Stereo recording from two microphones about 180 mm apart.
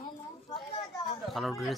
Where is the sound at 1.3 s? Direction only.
Centre (ahead or behind).